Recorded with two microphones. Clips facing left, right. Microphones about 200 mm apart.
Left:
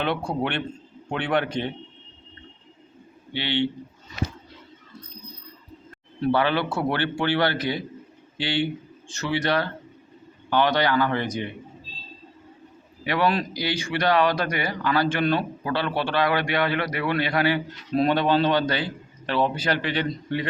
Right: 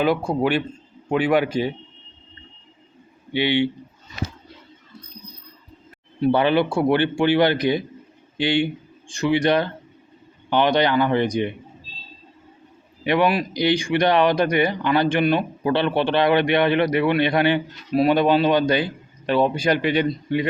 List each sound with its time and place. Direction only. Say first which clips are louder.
0.0 s a man's voice: right 6 dB; 5° right (ahead or behind)
3.3 s a man's voice: right 5 dB; 15° right (ahead or behind)
6.1 s a man's voice: right 4 dB; 15° right (ahead or behind)
13.1 s speech: right 4 dB; 15° right (ahead or behind)
17.9 s a man's voice: right 4 dB; 10° right (ahead or behind)